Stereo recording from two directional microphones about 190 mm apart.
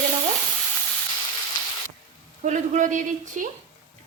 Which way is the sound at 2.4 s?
40° right (ahead or behind).